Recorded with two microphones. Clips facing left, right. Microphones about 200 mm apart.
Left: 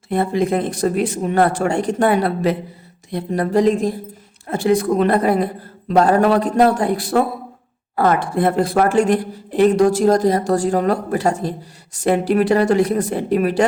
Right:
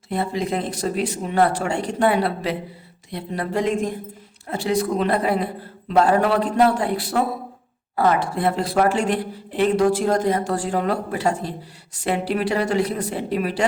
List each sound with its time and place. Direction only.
0.1 s speech: 50° left (ahead or behind)
4.4 s speech: 50° left (ahead or behind)